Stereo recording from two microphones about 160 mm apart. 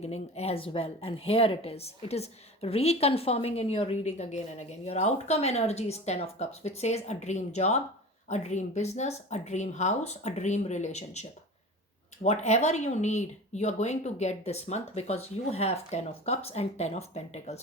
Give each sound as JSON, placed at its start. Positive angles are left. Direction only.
{"t": 0.0, "sound": "a woman's voice", "side_deg": 40}